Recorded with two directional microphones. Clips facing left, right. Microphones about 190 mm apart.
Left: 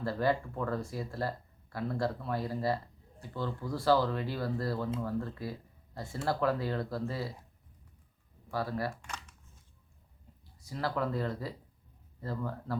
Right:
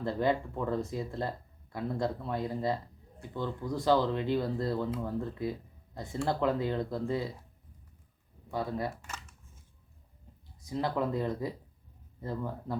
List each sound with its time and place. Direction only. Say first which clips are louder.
0.0 s speech: right 1 dB; 20° right (ahead or behind)
8.4 s speech: right 1 dB; 20° right (ahead or behind)
10.6 s speech: right 2 dB; 20° right (ahead or behind)